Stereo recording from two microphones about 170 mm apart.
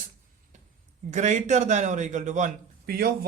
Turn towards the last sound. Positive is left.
turn(degrees=-60)  # may be behind; listen again after turning